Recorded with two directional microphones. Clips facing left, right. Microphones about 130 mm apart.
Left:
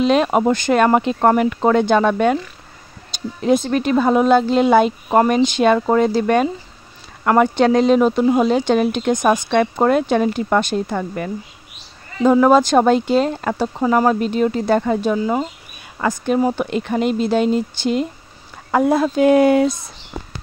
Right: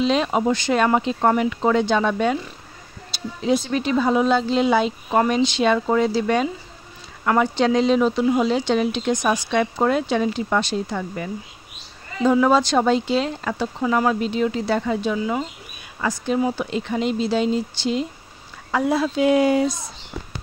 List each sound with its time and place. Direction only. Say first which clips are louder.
0.0 s speech: left 4 dB; 55° left (ahead or behind)
3.3 s speech: left 4 dB; 50° left (ahead or behind)
16.0 s speech: left 4 dB; 50° left (ahead or behind)